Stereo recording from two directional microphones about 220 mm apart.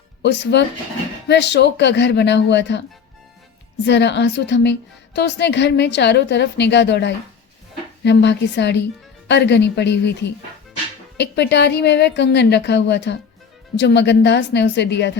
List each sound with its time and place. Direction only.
0.2 s a woman's voice: 50° left (ahead or behind)
3.8 s a woman's voice: 50° left (ahead or behind)